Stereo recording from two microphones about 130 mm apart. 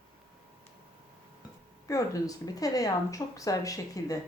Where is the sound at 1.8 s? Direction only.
25° left (ahead or behind).